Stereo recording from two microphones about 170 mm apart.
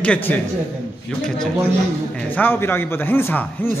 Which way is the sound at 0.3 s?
10° left (ahead or behind).